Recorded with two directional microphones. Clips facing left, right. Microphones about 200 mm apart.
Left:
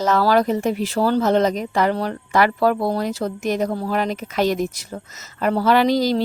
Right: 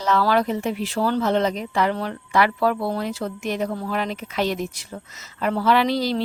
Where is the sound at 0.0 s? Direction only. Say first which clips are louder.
Left 3 dB; 40° left (ahead or behind).